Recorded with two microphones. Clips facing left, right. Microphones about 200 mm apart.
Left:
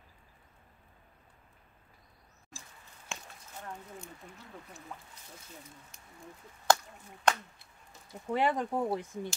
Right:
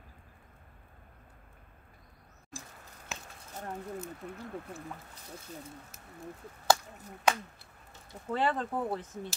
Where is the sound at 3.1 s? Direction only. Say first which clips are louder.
Even; 5° right (ahead or behind).